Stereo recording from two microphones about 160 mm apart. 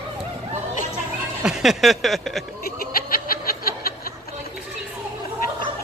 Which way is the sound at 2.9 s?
65° left (ahead or behind).